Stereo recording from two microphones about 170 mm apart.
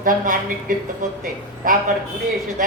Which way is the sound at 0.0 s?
55° right (ahead or behind).